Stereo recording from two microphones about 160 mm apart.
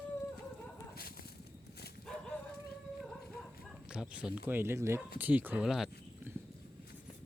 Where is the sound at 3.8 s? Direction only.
5° right (ahead or behind).